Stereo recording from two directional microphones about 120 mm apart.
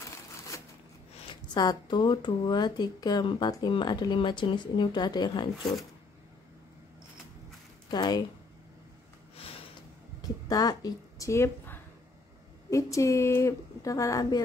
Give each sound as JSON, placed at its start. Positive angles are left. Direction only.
{"t": 1.3, "sound": "speech", "side_deg": 35}
{"t": 7.9, "sound": "speech", "side_deg": 35}
{"t": 10.2, "sound": "a sound", "side_deg": 30}
{"t": 12.6, "sound": "a woman's voice", "side_deg": 25}